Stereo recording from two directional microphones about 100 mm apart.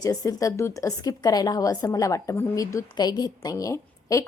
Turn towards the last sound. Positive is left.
turn(degrees=35)  # may be behind; listen again after turning